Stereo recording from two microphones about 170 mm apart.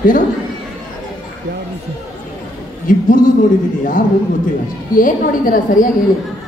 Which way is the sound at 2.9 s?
55° left (ahead or behind).